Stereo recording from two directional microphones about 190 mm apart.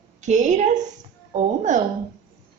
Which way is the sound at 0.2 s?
40° right (ahead or behind).